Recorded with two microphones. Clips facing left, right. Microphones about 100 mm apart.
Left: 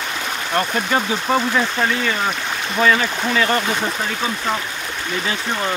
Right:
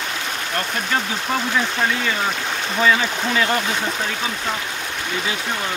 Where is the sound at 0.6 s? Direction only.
15° left (ahead or behind).